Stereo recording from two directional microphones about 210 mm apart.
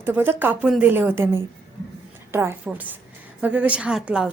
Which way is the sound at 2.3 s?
10° right (ahead or behind).